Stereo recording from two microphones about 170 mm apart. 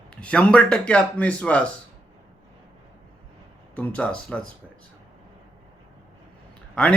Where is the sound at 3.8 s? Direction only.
10° left (ahead or behind).